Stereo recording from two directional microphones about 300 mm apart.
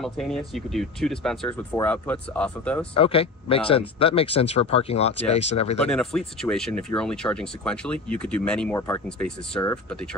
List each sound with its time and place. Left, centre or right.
0.0 s speech: centre
2.9 s speech: centre
5.9 s speech: centre